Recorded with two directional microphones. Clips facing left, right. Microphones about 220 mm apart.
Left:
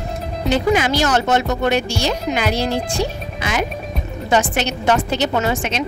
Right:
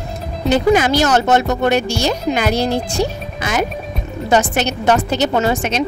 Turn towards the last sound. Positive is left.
turn(degrees=-40)  # may be behind; listen again after turning